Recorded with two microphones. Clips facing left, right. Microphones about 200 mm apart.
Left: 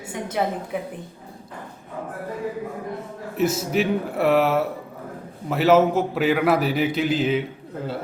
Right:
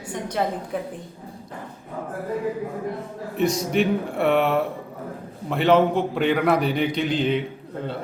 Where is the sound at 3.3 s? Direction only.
5° left (ahead or behind).